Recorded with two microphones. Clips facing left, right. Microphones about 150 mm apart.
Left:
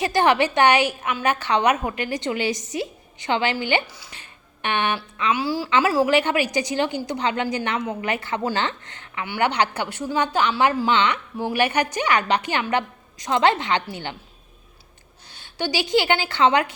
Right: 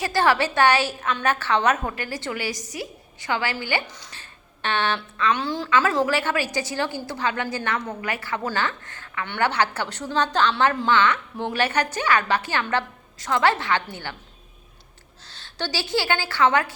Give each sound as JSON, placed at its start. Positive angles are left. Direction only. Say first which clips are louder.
{"t": 0.0, "sound": "a woman's voice", "louder": "left 2 dB", "side_deg": 20}
{"t": 4.0, "sound": "a sound", "louder": "even", "side_deg": 15}
{"t": 5.3, "sound": "a woman's voice", "louder": "left 2 dB", "side_deg": 5}
{"t": 15.3, "sound": "a woman's voice", "louder": "left 4 dB", "side_deg": 15}